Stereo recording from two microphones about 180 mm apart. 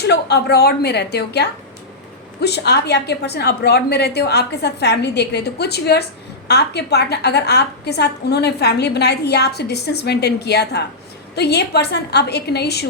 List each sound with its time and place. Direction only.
0.0 s a woman's voice: 70° left (ahead or behind)